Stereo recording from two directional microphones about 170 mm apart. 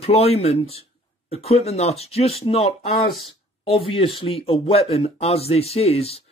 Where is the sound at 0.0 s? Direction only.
35° left (ahead or behind).